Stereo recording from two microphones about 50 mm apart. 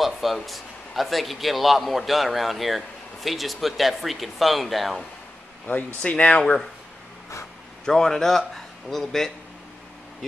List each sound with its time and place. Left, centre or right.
0.0 s a man's voice: centre
6.0 s speech: left
7.8 s a man's voice: centre